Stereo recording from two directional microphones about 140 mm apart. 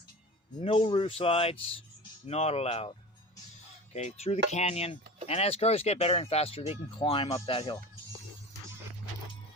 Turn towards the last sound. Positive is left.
turn(degrees=40)  # may be behind; listen again after turning